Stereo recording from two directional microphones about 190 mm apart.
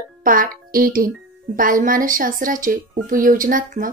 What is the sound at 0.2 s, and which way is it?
A child's voice, 45° right (ahead or behind).